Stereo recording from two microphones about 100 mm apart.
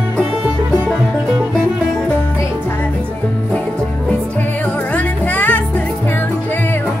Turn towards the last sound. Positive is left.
turn(degrees=15)  # may be behind; listen again after turning